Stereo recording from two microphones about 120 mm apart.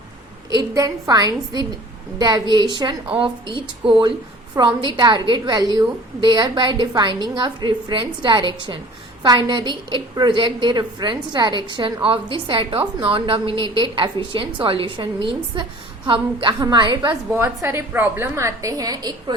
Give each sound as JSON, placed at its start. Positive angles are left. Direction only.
{"t": 0.5, "sound": "a woman's voice", "side_deg": -30}
{"t": 17.3, "sound": "a woman's voice", "side_deg": -20}